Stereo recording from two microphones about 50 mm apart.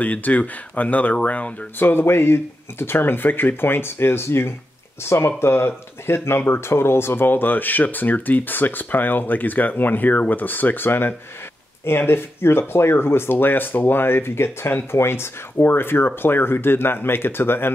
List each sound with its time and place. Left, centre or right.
0.0 s speech: left
1.8 s speech: left